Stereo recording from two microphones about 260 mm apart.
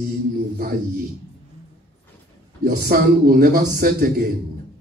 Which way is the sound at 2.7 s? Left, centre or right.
Right.